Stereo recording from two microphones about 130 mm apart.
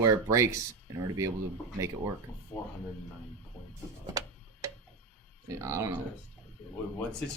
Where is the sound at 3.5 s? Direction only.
15° left (ahead or behind).